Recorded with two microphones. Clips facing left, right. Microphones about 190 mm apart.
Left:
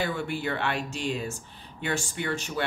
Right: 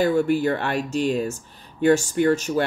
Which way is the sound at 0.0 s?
40° right (ahead or behind).